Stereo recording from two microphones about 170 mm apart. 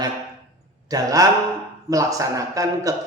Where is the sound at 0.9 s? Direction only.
20° right (ahead or behind).